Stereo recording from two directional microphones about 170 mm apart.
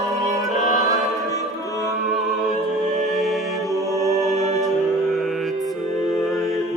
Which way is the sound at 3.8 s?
20° left (ahead or behind).